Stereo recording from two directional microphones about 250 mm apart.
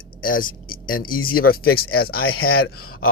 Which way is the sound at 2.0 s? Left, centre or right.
Left.